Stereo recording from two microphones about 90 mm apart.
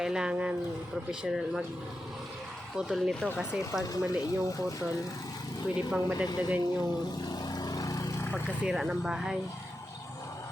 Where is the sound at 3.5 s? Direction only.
10° right (ahead or behind).